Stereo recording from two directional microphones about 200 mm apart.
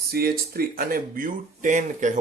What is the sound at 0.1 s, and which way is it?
Speech, 50° right (ahead or behind).